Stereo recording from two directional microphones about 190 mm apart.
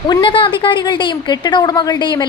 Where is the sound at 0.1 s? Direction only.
25° left (ahead or behind).